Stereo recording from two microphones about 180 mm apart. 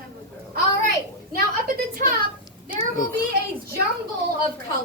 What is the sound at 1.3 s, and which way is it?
Speech, 55° right (ahead or behind).